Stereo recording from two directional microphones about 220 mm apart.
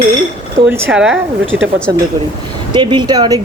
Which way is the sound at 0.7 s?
5° right (ahead or behind).